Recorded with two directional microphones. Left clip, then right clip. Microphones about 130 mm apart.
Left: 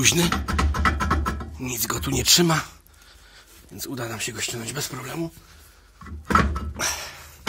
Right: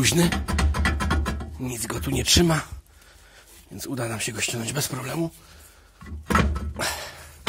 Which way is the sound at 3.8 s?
55° right (ahead or behind).